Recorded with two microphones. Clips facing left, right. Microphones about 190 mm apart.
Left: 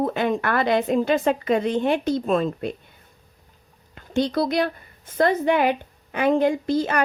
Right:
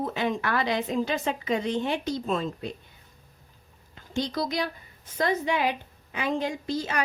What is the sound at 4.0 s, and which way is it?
A woman's voice, 60° left (ahead or behind).